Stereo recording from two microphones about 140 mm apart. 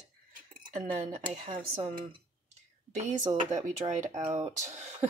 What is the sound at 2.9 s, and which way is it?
Speech, 60° right (ahead or behind).